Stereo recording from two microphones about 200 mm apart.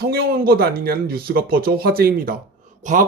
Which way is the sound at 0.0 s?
50° right (ahead or behind).